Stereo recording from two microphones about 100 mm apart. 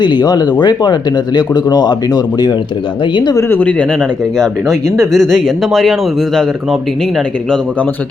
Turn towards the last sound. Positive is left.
turn(degrees=5)  # may be behind; listen again after turning